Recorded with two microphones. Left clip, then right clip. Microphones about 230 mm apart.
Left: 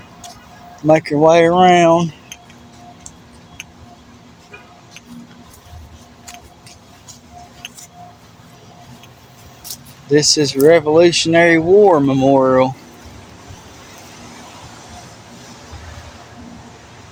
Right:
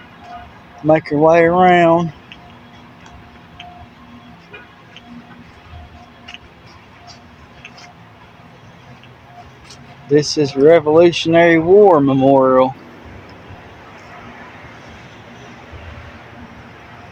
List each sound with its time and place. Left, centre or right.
0.9 s speech: left
9.6 s speech: centre